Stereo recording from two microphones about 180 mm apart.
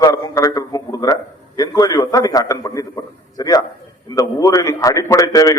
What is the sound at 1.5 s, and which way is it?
A man's voice, 20° left (ahead or behind).